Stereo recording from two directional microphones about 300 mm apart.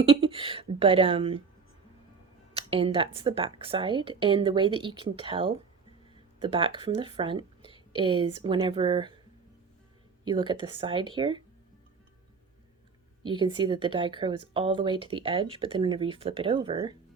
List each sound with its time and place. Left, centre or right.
0.0 s speech: centre
2.6 s speech: centre
10.2 s speech: centre
13.2 s speech: centre